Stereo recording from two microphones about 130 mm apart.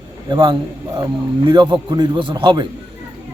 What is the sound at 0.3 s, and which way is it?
A man's voice, 40° right (ahead or behind).